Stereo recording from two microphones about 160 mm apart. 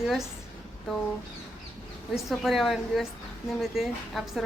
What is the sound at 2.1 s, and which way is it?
A woman's voice, centre (ahead or behind).